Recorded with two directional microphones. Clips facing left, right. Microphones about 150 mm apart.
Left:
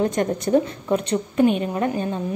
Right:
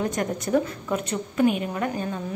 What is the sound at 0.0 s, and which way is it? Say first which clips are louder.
A woman's voice: left 5 dB; 25° left (ahead or behind).